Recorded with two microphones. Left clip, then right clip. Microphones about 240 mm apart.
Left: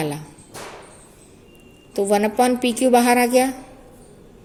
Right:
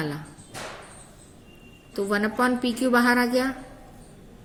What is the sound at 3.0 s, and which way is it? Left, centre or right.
Speech, centre.